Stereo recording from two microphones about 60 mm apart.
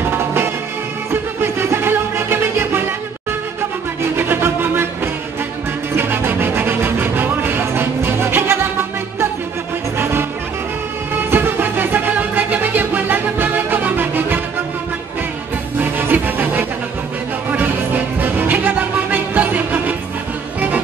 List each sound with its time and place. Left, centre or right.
0.0 s music: right
4.2 s music: right
11.2 s music: right
15.8 s music: right